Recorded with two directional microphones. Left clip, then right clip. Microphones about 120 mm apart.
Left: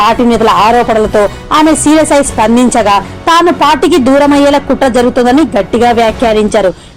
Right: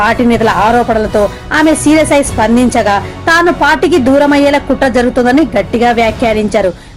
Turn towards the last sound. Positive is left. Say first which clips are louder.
# left 3 dB
turn(degrees=25)  # may be behind; listen again after turning